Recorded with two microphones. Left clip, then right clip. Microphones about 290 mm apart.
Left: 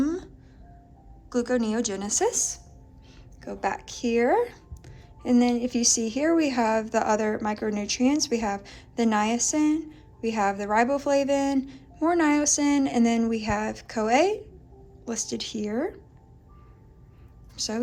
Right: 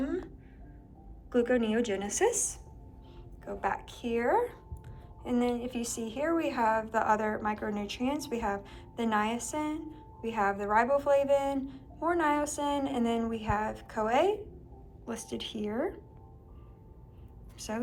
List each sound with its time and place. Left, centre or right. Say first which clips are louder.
1.5 s a woman's voice: left 2 dB; centre
3.4 s a woman's voice: left 4 dB; left